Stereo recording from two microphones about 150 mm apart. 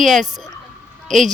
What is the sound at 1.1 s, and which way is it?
Speech, 5° left (ahead or behind).